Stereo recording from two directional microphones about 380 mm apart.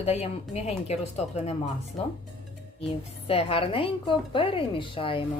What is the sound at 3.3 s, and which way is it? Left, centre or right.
A woman's voice, centre.